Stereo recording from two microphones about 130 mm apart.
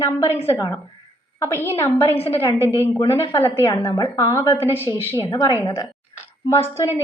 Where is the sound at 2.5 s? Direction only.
20° left (ahead or behind).